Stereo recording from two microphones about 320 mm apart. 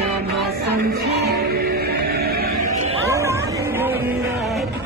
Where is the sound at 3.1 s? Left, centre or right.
Centre.